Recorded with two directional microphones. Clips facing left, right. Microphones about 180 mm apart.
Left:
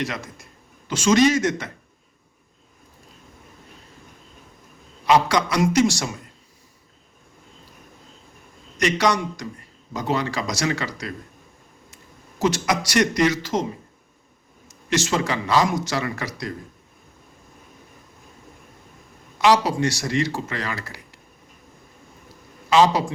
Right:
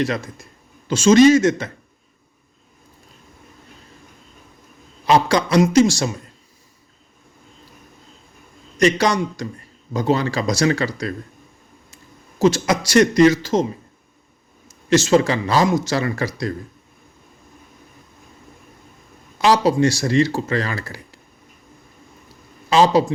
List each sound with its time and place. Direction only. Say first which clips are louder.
0.0 s speech: right 7 dB; 30° right (ahead or behind)
5.0 s speech: right 2 dB; 30° right (ahead or behind)
8.8 s speech: right 4 dB; 30° right (ahead or behind)
12.4 s speech: right 5 dB; 25° right (ahead or behind)
14.7 s speech: right 8 dB; 30° right (ahead or behind)
19.4 s speech: right 3 dB; 30° right (ahead or behind)
22.7 s speech: right 3 dB; 30° right (ahead or behind)